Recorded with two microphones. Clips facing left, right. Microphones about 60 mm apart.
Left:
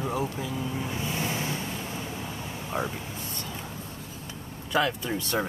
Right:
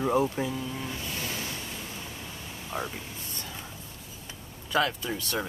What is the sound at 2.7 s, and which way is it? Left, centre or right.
Speech, centre.